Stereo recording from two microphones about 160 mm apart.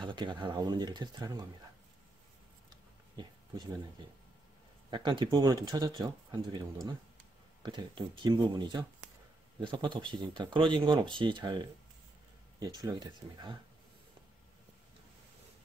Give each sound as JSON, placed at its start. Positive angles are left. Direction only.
{"t": 0.0, "sound": "speech", "side_deg": -30}
{"t": 4.9, "sound": "speech", "side_deg": -30}